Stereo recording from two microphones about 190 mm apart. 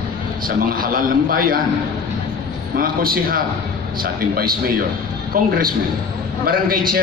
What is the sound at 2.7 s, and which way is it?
A man's voice, 50° right (ahead or behind).